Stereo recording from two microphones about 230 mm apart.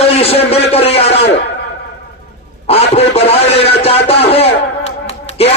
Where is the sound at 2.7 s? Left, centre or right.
Left.